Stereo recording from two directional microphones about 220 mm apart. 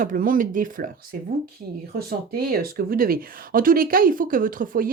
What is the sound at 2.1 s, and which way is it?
Speech, 45° right (ahead or behind).